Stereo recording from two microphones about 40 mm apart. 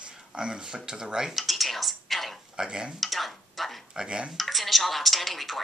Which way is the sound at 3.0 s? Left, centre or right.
Centre.